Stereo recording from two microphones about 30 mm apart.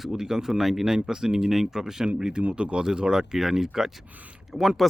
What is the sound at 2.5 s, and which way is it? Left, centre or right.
Speech, right.